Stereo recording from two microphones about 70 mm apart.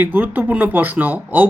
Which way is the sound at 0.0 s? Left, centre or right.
Right.